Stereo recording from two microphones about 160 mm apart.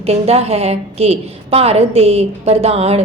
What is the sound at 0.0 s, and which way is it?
A woman's voice, 40° right (ahead or behind).